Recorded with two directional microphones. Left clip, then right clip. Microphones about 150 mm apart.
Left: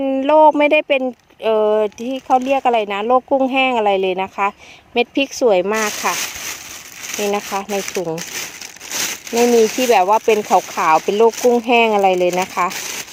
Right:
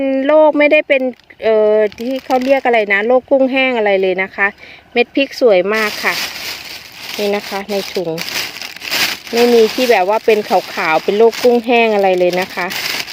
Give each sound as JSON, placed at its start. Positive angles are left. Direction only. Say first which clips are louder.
{"t": 0.0, "sound": "speech", "louder": "right 1 dB", "side_deg": 5}
{"t": 5.1, "sound": "speech", "louder": "right 4 dB", "side_deg": -40}
{"t": 5.5, "sound": "speech", "louder": "right 4 dB", "side_deg": 5}
{"t": 7.2, "sound": "speech", "louder": "right 3 dB", "side_deg": 5}
{"t": 8.0, "sound": "speech", "louder": "right 3 dB", "side_deg": 25}
{"t": 9.3, "sound": "speech", "louder": "right 3 dB", "side_deg": 0}